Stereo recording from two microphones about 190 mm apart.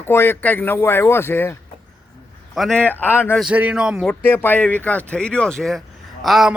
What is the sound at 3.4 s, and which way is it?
Speech, 5° right (ahead or behind).